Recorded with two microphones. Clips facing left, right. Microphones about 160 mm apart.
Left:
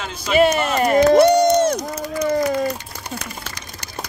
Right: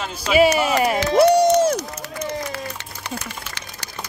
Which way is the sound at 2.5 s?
75° right (ahead or behind).